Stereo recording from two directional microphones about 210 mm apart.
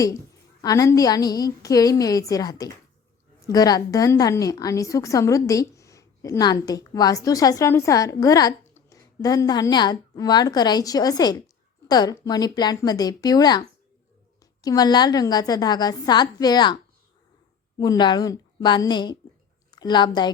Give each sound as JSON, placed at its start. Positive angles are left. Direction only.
{"t": 0.6, "sound": "a woman's voice", "side_deg": 15}
{"t": 17.7, "sound": "a woman's voice", "side_deg": 20}